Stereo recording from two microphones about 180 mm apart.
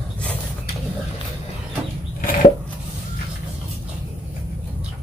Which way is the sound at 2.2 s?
50° left (ahead or behind).